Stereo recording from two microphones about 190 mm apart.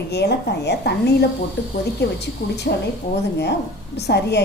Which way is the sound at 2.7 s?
55° left (ahead or behind).